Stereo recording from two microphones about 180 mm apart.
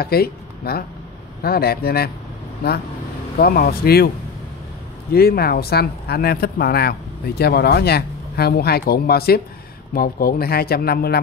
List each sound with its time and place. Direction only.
0.0 s speech: 60° left (ahead or behind)
5.1 s speech: 60° left (ahead or behind)